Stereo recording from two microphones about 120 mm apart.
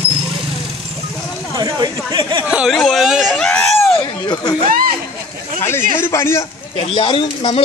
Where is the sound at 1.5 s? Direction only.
35° right (ahead or behind).